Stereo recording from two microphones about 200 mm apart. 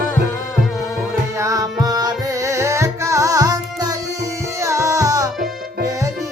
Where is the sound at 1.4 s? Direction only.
15° right (ahead or behind).